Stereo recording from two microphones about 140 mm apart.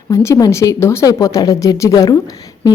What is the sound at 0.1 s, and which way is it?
A woman's voice, 20° left (ahead or behind).